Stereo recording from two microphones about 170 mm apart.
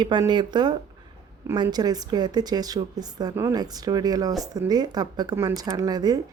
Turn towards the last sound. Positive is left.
turn(degrees=-20)  # may be behind; listen again after turning